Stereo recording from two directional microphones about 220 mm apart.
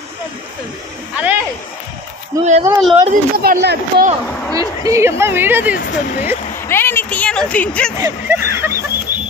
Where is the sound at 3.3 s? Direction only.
45° right (ahead or behind).